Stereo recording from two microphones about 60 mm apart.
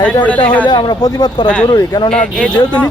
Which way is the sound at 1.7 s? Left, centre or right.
Left.